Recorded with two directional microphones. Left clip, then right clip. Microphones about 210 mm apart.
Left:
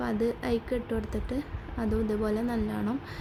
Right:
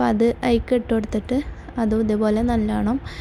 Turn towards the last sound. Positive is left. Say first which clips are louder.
# right 9 dB
turn(degrees=-30)  # may be behind; listen again after turning